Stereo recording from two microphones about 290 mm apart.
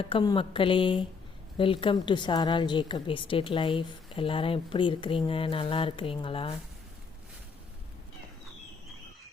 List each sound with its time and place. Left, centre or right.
0.0 s a woman's voice: centre